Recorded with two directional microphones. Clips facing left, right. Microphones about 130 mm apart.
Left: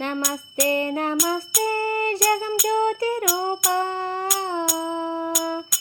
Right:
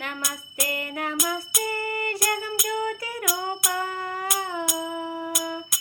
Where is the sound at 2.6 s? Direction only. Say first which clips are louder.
Left 7 dB; 35° left (ahead or behind).